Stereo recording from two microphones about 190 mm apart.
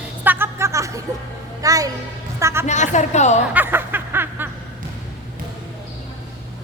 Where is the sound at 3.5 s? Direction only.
10° right (ahead or behind).